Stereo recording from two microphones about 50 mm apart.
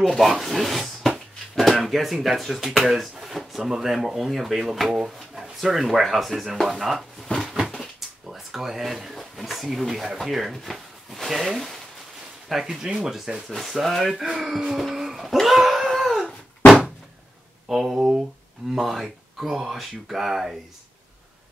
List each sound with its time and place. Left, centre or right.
0.0 s speech: centre
8.3 s speech: centre
13.5 s speech: centre
14.8 s a sound: centre
17.6 s speech: centre